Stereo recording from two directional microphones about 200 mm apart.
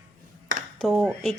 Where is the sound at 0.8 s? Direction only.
Centre (ahead or behind).